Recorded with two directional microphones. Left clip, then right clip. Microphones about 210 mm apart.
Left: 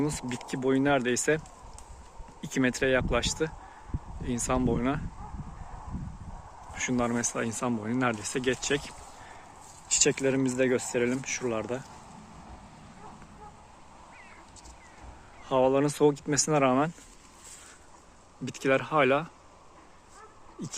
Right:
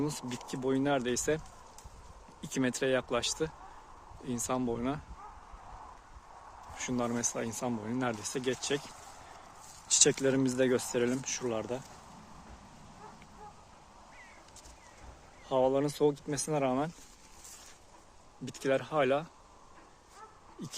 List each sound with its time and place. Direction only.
0.0 s speech: 10° right (ahead or behind)
2.4 s speech: 10° right (ahead or behind)
6.7 s speech: 10° right (ahead or behind)
9.9 s speech: 25° right (ahead or behind)
15.4 s speech: 5° right (ahead or behind)
18.4 s speech: centre (ahead or behind)